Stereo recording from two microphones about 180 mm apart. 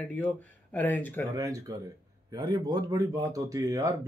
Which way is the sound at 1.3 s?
20° right (ahead or behind).